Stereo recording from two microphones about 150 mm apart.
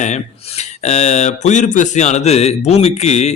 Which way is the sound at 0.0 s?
50° left (ahead or behind).